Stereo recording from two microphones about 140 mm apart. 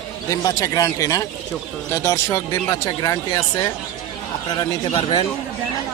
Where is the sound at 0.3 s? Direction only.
25° left (ahead or behind).